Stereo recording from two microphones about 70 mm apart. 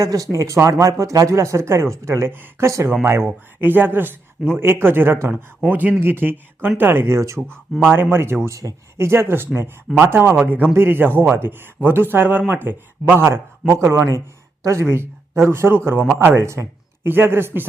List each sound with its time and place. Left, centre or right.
0.0 s speech: right
2.6 s speech: right
3.2 s speech: right